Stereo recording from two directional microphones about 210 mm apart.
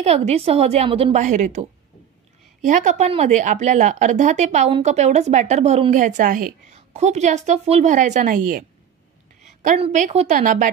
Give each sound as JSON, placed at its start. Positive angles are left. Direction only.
{"t": 0.0, "sound": "speech", "side_deg": -30}